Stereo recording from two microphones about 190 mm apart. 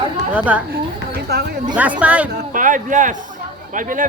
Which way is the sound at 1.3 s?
55° right (ahead or behind).